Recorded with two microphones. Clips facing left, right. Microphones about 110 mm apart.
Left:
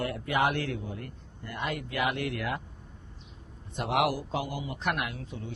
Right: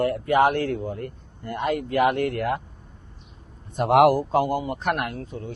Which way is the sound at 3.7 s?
50° right (ahead or behind).